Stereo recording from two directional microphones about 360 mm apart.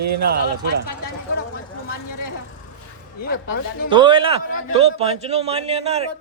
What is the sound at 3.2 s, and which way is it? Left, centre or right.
Speech, left.